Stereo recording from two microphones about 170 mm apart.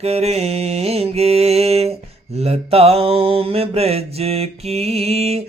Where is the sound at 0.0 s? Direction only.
40° right (ahead or behind).